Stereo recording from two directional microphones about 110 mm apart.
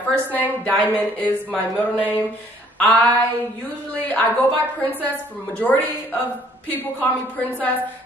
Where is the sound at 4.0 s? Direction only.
15° left (ahead or behind).